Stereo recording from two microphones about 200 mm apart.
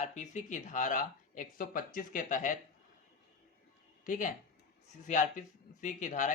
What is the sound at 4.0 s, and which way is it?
A man's voice, 40° left (ahead or behind).